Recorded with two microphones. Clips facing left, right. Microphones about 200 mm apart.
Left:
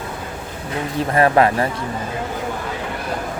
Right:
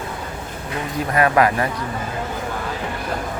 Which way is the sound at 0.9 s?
30° left (ahead or behind).